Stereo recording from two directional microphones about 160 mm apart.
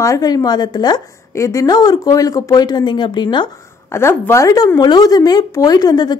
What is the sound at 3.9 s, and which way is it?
A woman's voice, 15° left (ahead or behind).